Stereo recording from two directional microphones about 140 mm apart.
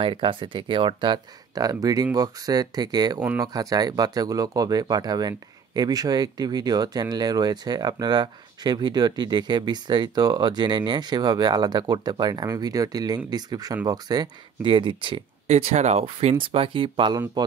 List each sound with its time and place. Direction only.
0.0 s speech: 40° right (ahead or behind)
15.5 s speech: 55° right (ahead or behind); by 17.2 s 35° right (ahead or behind)